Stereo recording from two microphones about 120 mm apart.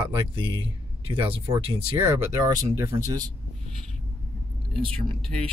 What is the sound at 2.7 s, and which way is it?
Speech, 25° right (ahead or behind).